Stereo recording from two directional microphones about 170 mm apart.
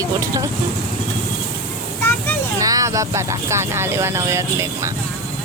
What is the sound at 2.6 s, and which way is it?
Speech, 20° right (ahead or behind).